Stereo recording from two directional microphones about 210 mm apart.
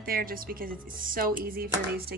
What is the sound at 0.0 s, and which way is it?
A woman's voice, 45° right (ahead or behind).